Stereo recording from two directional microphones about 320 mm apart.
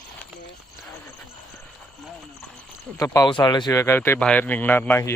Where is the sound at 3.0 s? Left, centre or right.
Centre.